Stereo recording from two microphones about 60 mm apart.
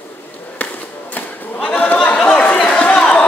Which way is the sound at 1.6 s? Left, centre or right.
Left.